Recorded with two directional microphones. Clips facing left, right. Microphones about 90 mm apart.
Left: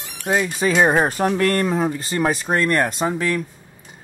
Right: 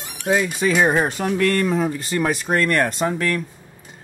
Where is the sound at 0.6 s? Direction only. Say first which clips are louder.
Left 3 dB; 25° left (ahead or behind).